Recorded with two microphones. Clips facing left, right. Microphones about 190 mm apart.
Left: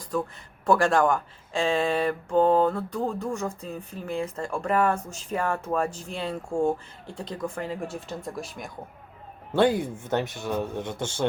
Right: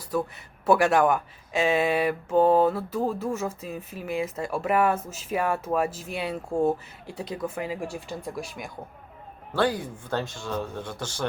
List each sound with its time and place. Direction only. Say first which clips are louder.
0.1 s speech: right 1 dB; 10° right (ahead or behind)
9.5 s speech: left 4 dB; 25° left (ahead or behind)